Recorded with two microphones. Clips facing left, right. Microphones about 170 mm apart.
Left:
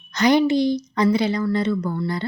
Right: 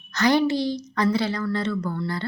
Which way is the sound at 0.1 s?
15° left (ahead or behind).